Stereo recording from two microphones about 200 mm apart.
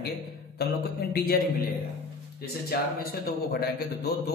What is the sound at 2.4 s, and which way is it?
A man's voice, 50° left (ahead or behind).